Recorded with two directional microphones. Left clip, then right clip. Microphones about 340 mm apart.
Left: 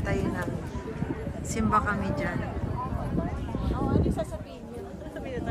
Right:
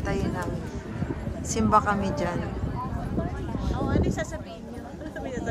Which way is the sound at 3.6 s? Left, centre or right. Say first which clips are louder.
Right 1 dB; right.